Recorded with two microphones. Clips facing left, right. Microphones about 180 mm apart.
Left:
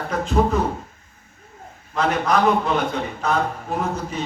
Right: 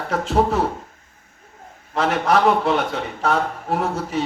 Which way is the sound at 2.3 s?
80° right.